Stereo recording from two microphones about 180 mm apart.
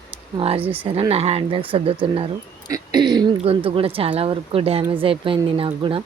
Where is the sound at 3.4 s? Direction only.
30° right (ahead or behind).